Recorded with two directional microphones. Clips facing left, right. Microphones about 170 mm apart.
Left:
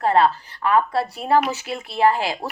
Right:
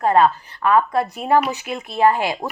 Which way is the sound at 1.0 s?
20° right (ahead or behind).